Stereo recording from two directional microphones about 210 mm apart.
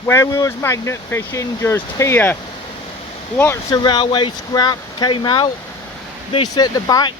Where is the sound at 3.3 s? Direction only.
10° left (ahead or behind).